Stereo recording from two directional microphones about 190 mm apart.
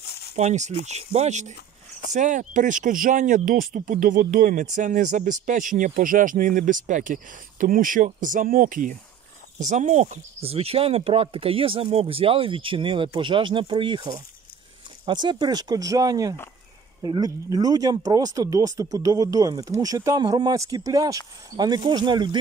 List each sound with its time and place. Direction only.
0.0 s a sound: 55° left (ahead or behind)
0.4 s speech: 35° right (ahead or behind)
15.0 s speech: 25° right (ahead or behind)